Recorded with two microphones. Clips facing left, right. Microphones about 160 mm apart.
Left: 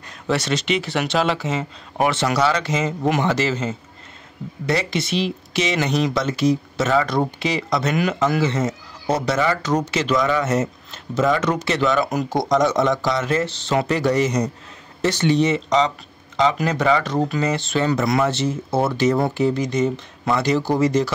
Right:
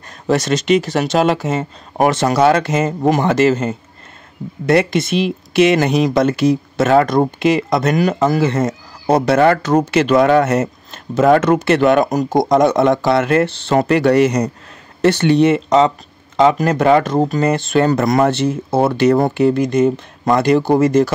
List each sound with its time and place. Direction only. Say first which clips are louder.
0.3 s speech: right 7 dB; 45° right (ahead or behind)
8.0 s speech: right 5 dB; 40° right (ahead or behind)